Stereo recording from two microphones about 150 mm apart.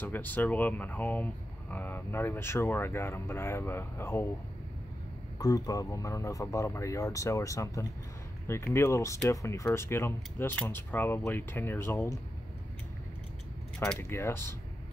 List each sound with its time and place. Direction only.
0.0 s speech: 10° left (ahead or behind)
5.4 s speech: 25° left (ahead or behind)
13.9 s speech: 15° left (ahead or behind)